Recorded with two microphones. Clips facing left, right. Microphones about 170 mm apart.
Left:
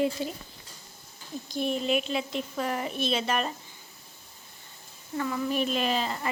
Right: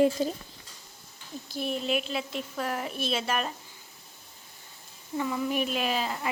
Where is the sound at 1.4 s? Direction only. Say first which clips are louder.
Left 2 dB; 5° right (ahead or behind).